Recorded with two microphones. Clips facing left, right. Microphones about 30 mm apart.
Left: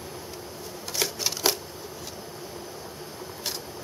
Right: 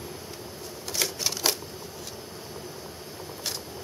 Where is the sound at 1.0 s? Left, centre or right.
Centre.